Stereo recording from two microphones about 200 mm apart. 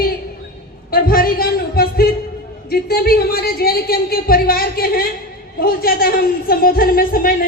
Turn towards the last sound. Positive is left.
turn(degrees=45)  # may be behind; listen again after turning